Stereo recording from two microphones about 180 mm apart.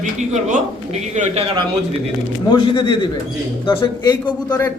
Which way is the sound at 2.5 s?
25° left (ahead or behind).